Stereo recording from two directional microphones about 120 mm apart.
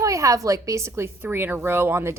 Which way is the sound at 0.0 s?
25° right (ahead or behind).